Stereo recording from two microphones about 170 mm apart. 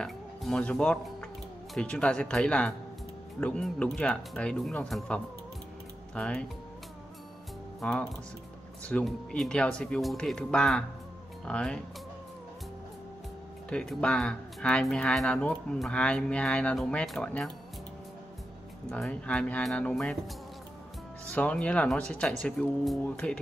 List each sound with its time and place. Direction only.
0.0 s speech: 5° left (ahead or behind)
7.8 s speech: 5° left (ahead or behind)
13.7 s speech: 5° left (ahead or behind)
18.9 s speech: 5° left (ahead or behind)
21.3 s speech: 5° left (ahead or behind)